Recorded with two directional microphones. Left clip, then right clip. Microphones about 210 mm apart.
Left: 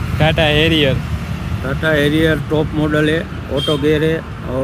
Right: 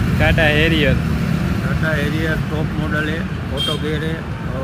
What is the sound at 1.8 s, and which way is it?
Speech, 40° left (ahead or behind).